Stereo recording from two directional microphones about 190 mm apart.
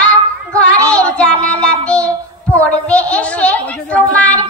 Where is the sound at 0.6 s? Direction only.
5° left (ahead or behind).